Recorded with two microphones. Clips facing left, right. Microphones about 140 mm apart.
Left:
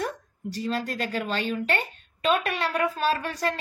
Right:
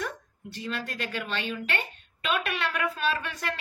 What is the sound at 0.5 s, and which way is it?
A woman's voice, 40° left (ahead or behind).